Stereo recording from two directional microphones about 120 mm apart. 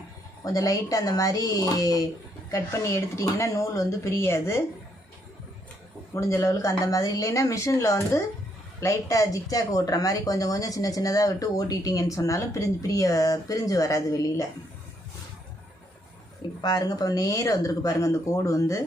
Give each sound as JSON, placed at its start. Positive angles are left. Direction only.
{"t": 0.4, "sound": "speech", "side_deg": 30}
{"t": 6.1, "sound": "speech", "side_deg": 25}
{"t": 16.6, "sound": "speech", "side_deg": 35}